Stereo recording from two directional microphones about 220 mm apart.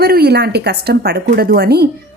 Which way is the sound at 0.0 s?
45° right (ahead or behind).